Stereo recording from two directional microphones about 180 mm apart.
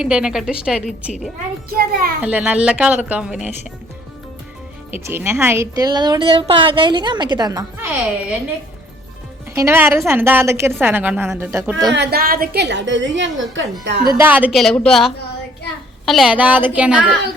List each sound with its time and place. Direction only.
0.0 s a woman's voice: 5° right (ahead or behind)
1.7 s a child's voice: 55° right (ahead or behind)
2.2 s a woman's voice: 10° right (ahead or behind)
5.0 s a woman's voice: 15° right (ahead or behind)
9.6 s a woman's voice: 15° right (ahead or behind)
11.9 s a woman's voice: 55° right (ahead or behind); by 13.7 s 90° right
13.8 s speech: 65° right (ahead or behind)
14.1 s a woman's voice: 10° right (ahead or behind)